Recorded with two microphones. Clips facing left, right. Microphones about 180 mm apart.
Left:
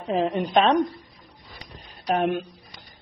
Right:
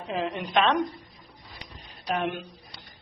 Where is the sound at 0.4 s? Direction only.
35° left (ahead or behind).